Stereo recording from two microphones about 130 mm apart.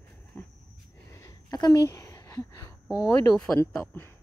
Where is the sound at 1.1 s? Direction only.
25° left (ahead or behind).